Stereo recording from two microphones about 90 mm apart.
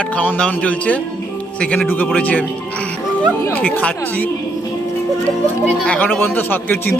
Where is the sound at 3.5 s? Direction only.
15° left (ahead or behind).